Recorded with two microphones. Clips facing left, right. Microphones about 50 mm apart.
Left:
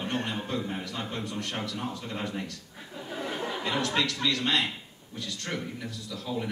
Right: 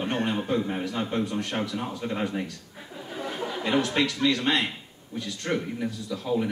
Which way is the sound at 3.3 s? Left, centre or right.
Centre.